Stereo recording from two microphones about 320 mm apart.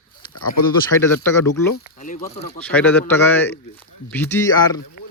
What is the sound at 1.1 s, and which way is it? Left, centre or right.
Speech, left.